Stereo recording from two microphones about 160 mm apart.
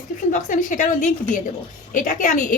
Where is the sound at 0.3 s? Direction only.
55° left (ahead or behind).